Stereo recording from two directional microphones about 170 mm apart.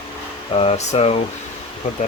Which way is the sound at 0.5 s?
35° left (ahead or behind).